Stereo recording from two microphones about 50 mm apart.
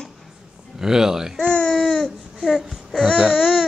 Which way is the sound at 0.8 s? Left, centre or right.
Centre.